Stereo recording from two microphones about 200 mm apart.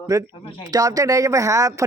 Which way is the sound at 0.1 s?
15° right (ahead or behind).